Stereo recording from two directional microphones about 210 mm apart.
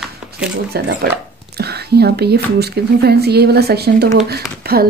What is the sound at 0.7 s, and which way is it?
Speech, 55° right (ahead or behind).